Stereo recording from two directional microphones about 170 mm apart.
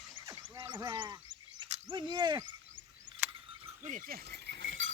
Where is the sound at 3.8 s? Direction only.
55° right (ahead or behind); by 4.9 s 90° right.